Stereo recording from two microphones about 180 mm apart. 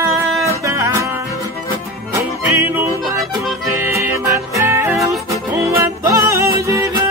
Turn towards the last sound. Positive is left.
turn(degrees=-15)  # may be behind; listen again after turning